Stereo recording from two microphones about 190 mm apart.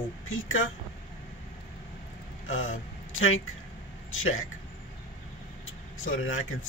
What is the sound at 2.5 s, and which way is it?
Speech, 90° left.